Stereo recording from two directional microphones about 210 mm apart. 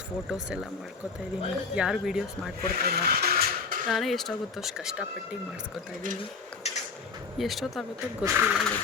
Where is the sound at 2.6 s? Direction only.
45° right (ahead or behind).